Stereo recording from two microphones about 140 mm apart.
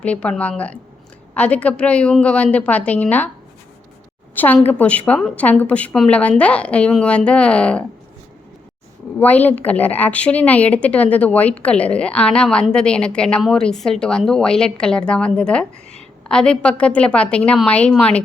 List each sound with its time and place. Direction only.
0.0 s a woman's voice: 10° left (ahead or behind)
4.4 s a woman's voice: 15° left (ahead or behind)
9.1 s a woman's voice: 10° left (ahead or behind)